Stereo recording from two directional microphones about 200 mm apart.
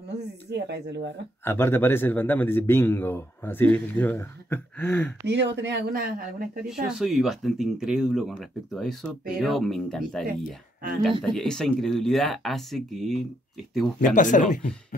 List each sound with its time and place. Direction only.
0.5 s speech: 60° right (ahead or behind)
1.4 s speech: 10° left (ahead or behind)
5.2 s speech: 60° right (ahead or behind)
6.9 s speech: centre (ahead or behind)
11.3 s speech: 5° left (ahead or behind)
14.0 s speech: 40° left (ahead or behind)